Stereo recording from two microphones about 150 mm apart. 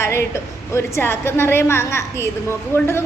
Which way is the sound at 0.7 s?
20° left (ahead or behind).